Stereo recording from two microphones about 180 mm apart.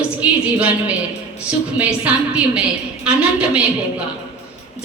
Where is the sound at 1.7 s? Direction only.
5° right (ahead or behind).